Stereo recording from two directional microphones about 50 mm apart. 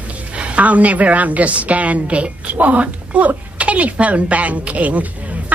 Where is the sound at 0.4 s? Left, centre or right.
Right.